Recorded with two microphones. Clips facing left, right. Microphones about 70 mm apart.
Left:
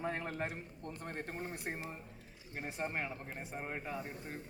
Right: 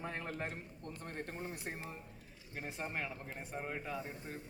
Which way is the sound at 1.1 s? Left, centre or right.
Left.